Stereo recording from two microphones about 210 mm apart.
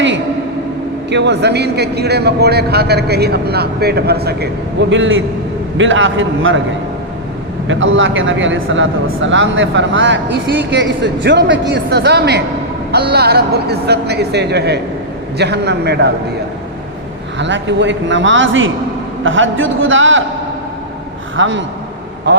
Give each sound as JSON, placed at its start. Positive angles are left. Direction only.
{"t": 1.1, "sound": "a man's voice", "side_deg": -55}
{"t": 7.7, "sound": "a man's voice", "side_deg": -65}
{"t": 17.3, "sound": "a man's voice", "side_deg": -60}
{"t": 21.3, "sound": "a man's voice", "side_deg": -65}